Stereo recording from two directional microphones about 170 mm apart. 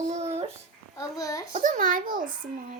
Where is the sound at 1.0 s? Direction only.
20° left (ahead or behind).